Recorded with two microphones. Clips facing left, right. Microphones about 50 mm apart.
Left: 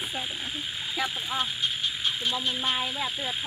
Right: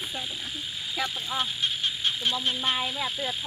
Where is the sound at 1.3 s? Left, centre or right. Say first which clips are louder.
Right 1 dB; centre.